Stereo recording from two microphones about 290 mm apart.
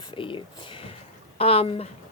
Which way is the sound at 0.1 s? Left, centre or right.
Centre.